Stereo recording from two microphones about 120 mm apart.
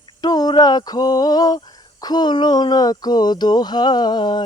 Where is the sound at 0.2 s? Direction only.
35° left (ahead or behind).